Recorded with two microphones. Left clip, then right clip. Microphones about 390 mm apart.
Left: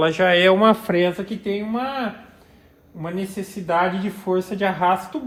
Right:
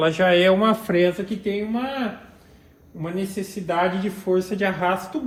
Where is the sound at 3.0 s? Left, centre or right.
Centre.